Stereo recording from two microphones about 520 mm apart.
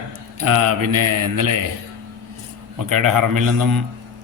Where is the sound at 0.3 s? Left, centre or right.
Right.